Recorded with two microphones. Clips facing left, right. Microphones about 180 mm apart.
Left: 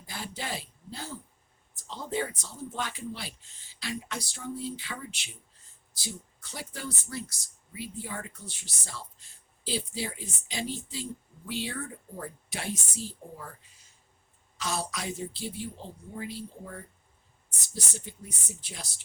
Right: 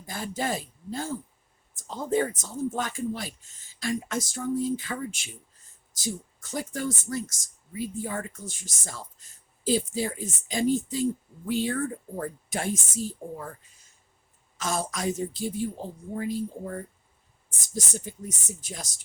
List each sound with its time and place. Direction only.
0.0 s speech: 45° right (ahead or behind)
14.6 s speech: 45° right (ahead or behind)